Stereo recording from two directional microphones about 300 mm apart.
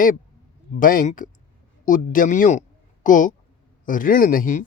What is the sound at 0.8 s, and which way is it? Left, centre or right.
Speech, left.